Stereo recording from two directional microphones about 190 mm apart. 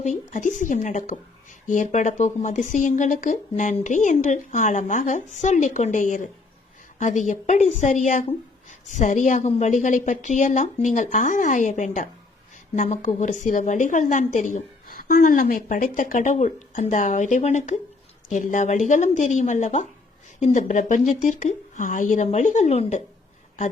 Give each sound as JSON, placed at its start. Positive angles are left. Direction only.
{"t": 0.0, "sound": "a woman's voice", "side_deg": 40}